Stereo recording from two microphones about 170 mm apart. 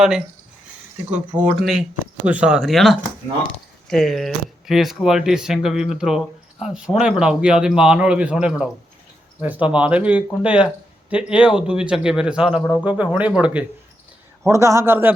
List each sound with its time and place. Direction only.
1.4 s speech: centre (ahead or behind)
14.4 s speech: 15° right (ahead or behind)